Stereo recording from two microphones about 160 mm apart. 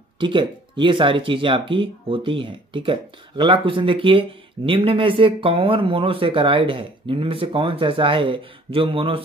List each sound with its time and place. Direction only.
0.2 s speech: 30° right (ahead or behind)